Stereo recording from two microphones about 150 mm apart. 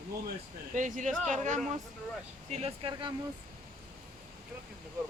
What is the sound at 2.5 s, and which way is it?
Speech, 40° right (ahead or behind).